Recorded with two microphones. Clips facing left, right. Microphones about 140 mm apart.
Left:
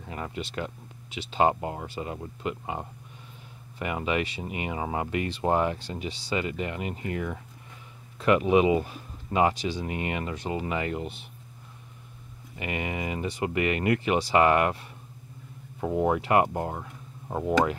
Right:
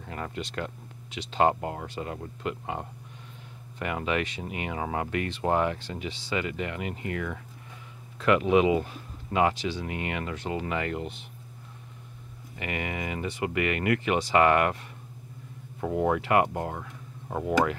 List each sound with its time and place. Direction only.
0.0 s a sound: 10° left (ahead or behind)
1.1 s speech: 5° left (ahead or behind)
3.8 s speech: 15° left (ahead or behind)
12.5 s speech: 20° left (ahead or behind)
14.3 s speech: 20° left (ahead or behind)
15.9 s speech: 20° left (ahead or behind)
16.5 s a sound: 15° left (ahead or behind)